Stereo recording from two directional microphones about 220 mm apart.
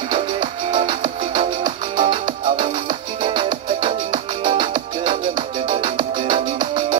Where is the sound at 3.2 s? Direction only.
20° right (ahead or behind).